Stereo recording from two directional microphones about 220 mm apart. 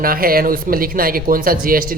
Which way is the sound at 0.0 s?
40° right (ahead or behind).